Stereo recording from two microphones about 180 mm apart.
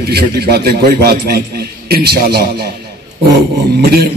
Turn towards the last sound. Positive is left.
turn(degrees=-60)  # may be behind; listen again after turning